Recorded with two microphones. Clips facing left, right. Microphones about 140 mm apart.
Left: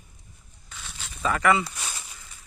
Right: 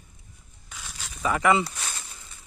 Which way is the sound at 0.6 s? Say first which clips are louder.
Right 1 dB; centre (ahead or behind).